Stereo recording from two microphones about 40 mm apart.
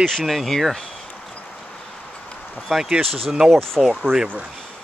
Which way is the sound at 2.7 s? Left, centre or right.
Centre.